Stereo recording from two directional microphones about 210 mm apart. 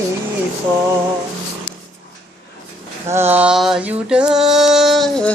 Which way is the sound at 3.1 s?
10° right (ahead or behind).